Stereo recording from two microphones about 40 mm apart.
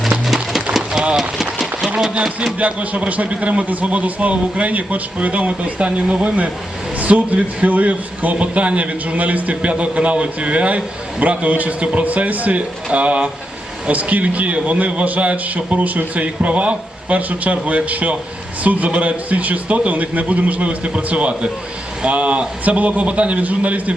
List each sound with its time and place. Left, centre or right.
0.5 s a sound: centre
1.1 s run: centre
2.6 s a man's voice: right